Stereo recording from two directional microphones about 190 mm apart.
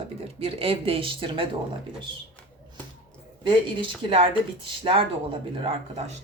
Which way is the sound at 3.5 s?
25° right (ahead or behind).